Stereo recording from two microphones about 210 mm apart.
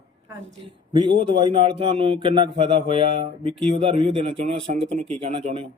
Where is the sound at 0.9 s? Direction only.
25° right (ahead or behind).